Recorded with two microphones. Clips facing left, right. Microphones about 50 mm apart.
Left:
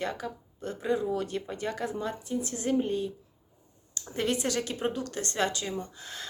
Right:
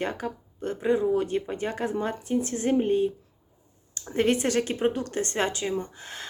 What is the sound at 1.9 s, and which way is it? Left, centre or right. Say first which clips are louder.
Speech: right 5 dB; right.